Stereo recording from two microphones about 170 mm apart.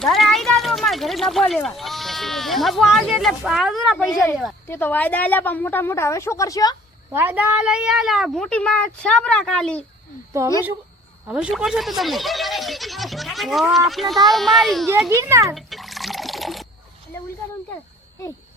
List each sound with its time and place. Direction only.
0.0 s speech: centre (ahead or behind)
4.7 s a woman's voice: 10° left (ahead or behind)
7.1 s speech: 10° right (ahead or behind); by 9.8 s 5° left (ahead or behind)
10.4 s a child's voice: 20° right (ahead or behind)
11.3 s speech: 5° right (ahead or behind)
15.1 s a child's voice: 15° right (ahead or behind)
15.5 s liquid: centre (ahead or behind)